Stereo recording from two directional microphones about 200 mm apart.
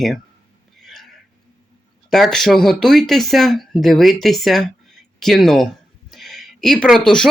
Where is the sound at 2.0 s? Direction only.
Centre (ahead or behind).